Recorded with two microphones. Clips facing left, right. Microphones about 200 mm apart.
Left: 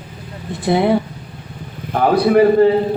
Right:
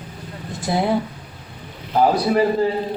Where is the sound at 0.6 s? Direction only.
60° left (ahead or behind).